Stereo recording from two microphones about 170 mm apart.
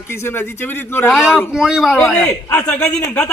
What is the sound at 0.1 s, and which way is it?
A man's voice, 15° left (ahead or behind).